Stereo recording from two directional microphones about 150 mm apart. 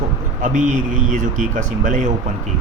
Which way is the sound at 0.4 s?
55° right (ahead or behind).